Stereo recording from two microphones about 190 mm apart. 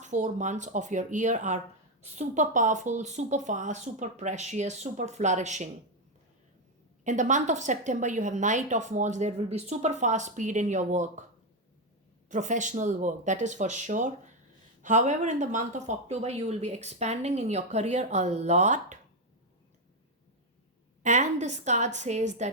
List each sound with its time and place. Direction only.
0.0 s a woman's voice: 40° right (ahead or behind)
7.0 s a woman's voice: 40° right (ahead or behind)
12.3 s a woman's voice: 40° right (ahead or behind)
21.0 s a woman's voice: 40° right (ahead or behind)